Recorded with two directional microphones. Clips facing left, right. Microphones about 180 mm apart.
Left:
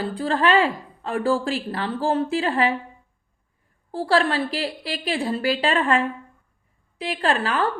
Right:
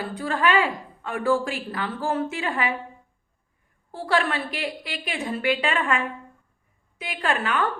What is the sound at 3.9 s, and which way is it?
A woman's voice, 30° left (ahead or behind).